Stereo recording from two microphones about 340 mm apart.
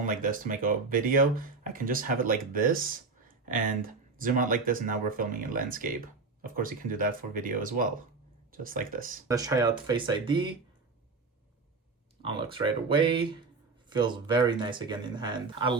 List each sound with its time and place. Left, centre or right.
0.0 s speech: right
9.2 s speech: centre
12.2 s speech: centre